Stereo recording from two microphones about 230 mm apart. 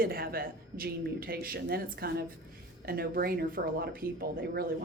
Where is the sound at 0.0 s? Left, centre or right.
Right.